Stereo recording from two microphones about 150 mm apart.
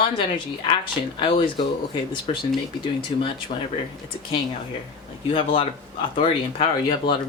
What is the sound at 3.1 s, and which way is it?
Speech, 30° left (ahead or behind).